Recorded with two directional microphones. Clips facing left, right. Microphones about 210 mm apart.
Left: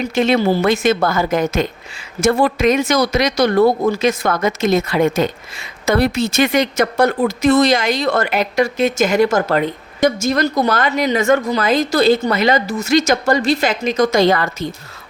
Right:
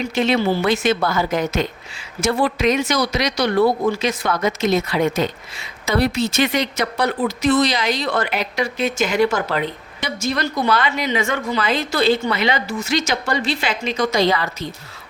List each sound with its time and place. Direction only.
0.0 s speech: 50° left (ahead or behind)